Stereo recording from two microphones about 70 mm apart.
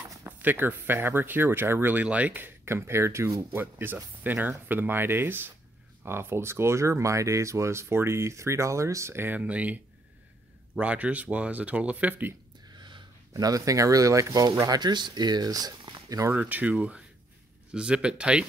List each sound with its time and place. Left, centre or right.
0.4 s speech: right
9.4 s speech: centre
10.8 s speech: centre
12.7 s speech: right
14.8 s speech: right
16.3 s speech: right